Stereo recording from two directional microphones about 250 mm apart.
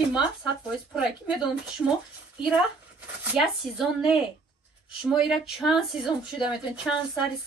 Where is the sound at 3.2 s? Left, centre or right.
Centre.